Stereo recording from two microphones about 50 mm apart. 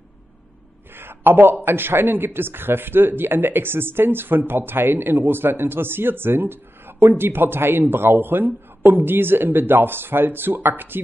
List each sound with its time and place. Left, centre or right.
0.9 s a man's voice: right